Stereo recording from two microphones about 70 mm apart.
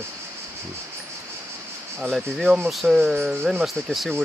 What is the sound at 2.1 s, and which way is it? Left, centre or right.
Speech, centre.